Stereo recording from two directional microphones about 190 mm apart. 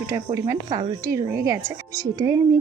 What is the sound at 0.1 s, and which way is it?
Speech, 15° right (ahead or behind).